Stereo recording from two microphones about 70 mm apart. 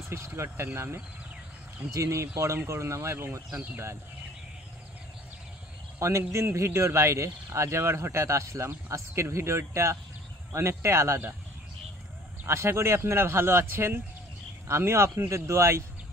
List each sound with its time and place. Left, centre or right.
0.1 s speech: right
5.9 s speech: right
12.4 s speech: right